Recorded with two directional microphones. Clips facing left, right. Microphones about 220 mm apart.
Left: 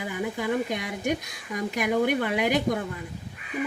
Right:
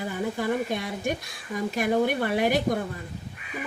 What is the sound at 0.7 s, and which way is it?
Speech, 15° left (ahead or behind).